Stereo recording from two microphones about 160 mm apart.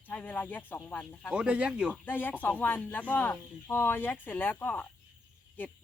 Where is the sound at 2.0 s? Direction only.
10° left (ahead or behind).